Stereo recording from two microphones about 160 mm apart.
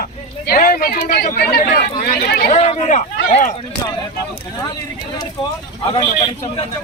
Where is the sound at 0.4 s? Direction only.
65° left (ahead or behind).